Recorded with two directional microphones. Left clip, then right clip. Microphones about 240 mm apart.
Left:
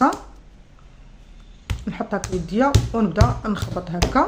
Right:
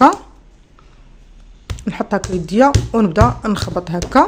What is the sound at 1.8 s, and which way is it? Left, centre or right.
Speech, right.